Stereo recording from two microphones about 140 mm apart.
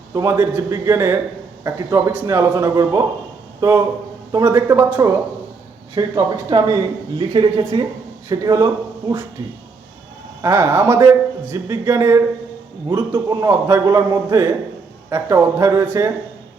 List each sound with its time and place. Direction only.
0.1 s a woman's voice: 25° right (ahead or behind)